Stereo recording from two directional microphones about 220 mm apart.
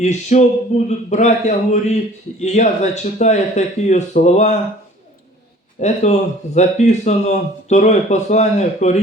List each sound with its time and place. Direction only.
0.0 s speech: 30° left (ahead or behind)
5.8 s speech: 30° left (ahead or behind)